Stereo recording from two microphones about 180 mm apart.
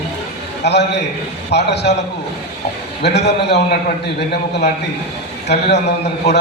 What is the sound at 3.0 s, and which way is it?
Speech, 70° left (ahead or behind).